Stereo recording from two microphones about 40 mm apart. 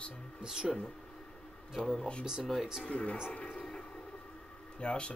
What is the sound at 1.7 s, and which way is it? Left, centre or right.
Speech, centre.